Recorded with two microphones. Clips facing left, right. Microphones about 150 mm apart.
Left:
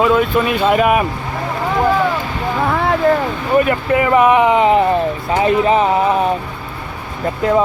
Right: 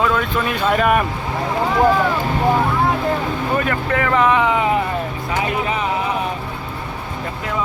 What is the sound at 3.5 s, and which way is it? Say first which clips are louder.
Speech: left 8 dB; 15° left (ahead or behind).